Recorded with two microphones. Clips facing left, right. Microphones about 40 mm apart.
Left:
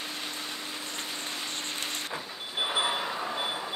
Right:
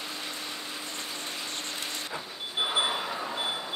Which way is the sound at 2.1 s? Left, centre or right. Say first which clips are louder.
Right 1 dB; centre.